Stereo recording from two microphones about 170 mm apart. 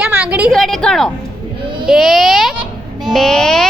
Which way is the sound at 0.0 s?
5° right (ahead or behind).